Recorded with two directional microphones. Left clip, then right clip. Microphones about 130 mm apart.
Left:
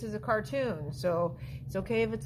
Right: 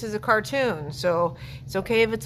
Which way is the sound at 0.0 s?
30° right (ahead or behind).